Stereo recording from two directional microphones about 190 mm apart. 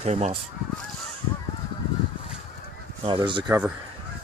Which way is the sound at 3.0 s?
25° right (ahead or behind).